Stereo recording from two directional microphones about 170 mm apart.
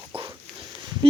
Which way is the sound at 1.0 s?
30° right (ahead or behind).